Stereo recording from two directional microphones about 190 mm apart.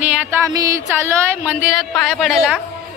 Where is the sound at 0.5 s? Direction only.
15° right (ahead or behind).